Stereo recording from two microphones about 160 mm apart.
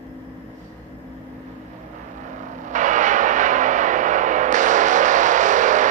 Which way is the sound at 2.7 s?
50° right (ahead or behind).